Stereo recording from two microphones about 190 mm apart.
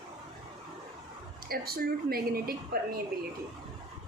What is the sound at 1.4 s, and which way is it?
A woman's voice, 55° right (ahead or behind).